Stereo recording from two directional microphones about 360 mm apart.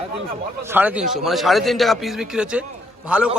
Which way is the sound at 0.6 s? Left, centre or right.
Centre.